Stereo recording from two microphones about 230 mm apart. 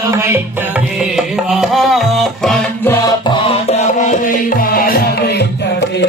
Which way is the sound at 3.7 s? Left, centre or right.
Left.